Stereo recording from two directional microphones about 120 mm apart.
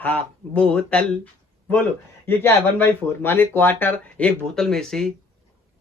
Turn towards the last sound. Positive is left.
turn(degrees=5)  # may be behind; listen again after turning